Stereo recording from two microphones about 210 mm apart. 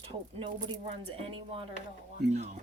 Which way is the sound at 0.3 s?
25° right (ahead or behind).